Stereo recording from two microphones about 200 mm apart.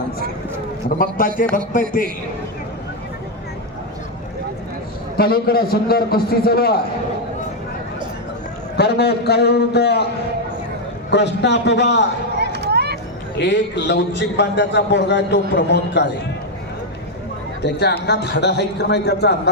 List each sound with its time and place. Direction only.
0.9 s a man's voice: 45° left (ahead or behind)
5.1 s a man's voice: 50° left (ahead or behind)
8.7 s a man's voice: 55° left (ahead or behind)
11.1 s a man's voice: 60° left (ahead or behind)
12.4 s a sound: 55° right (ahead or behind)
13.4 s a man's voice: 60° left (ahead or behind)
17.6 s a man's voice: 55° left (ahead or behind)